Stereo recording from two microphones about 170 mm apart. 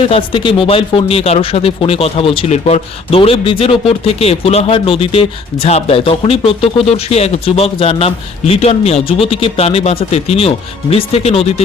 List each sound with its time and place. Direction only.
0.0 s speech: 30° left (ahead or behind)